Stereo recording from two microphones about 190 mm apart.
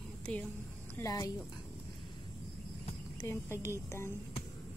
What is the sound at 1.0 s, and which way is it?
Speech, 15° left (ahead or behind).